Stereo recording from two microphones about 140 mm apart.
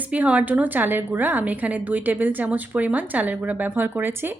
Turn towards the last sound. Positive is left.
turn(degrees=-15)  # may be behind; listen again after turning